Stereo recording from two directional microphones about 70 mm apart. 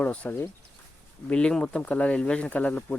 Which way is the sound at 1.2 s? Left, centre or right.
Centre.